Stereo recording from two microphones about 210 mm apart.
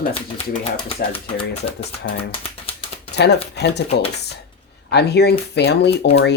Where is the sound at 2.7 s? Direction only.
25° left (ahead or behind).